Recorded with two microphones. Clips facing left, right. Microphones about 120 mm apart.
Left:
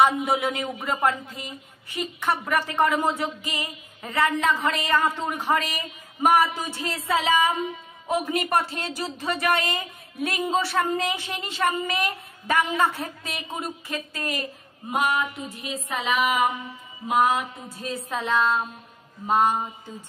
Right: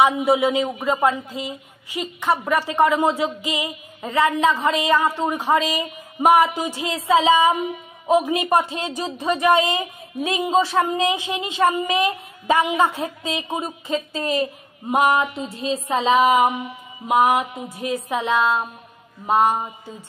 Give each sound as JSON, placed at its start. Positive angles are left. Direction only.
{"t": 0.0, "sound": "a woman's voice", "side_deg": -10}